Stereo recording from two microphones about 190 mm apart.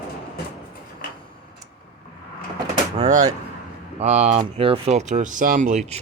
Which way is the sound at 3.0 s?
40° right (ahead or behind).